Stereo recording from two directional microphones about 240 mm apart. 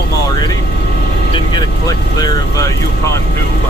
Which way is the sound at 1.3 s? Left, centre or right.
Centre.